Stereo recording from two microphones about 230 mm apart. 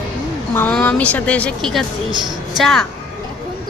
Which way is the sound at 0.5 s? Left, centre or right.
Centre.